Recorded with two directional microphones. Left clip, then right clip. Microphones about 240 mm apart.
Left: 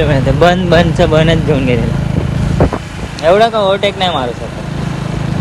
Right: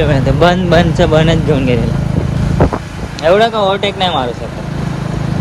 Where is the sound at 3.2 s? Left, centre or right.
Centre.